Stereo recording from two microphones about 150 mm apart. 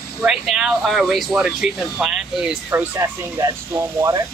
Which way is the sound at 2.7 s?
20° right (ahead or behind).